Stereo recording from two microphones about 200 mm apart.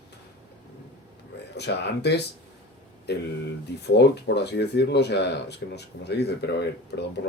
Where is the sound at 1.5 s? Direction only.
55° left (ahead or behind).